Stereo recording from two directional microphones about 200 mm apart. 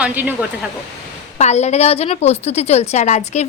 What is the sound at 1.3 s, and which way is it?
A woman's voice, 35° left (ahead or behind).